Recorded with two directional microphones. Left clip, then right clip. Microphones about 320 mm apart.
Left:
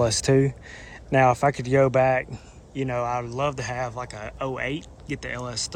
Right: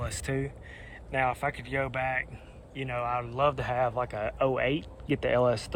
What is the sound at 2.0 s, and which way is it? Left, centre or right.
Speech, centre.